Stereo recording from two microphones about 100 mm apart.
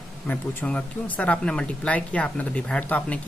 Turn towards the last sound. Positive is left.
turn(degrees=10)  # may be behind; listen again after turning